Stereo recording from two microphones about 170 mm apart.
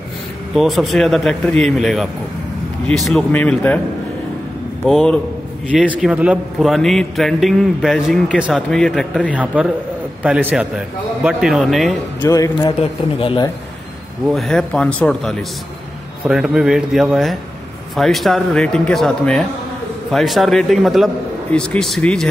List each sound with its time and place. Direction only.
0.6 s a man's voice: centre (ahead or behind)
4.8 s a man's voice: 5° left (ahead or behind)
9.3 s a man's voice: 10° right (ahead or behind)
12.2 s speech: 20° left (ahead or behind)
13.2 s a man's voice: 30° left (ahead or behind)
14.3 s a man's voice: centre (ahead or behind)